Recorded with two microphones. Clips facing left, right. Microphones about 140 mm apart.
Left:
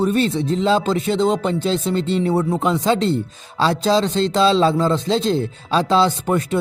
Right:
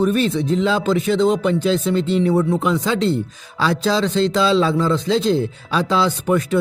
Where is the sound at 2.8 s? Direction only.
40° left (ahead or behind).